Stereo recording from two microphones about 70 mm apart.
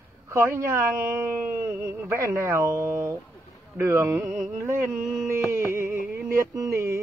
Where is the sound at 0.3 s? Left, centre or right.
Right.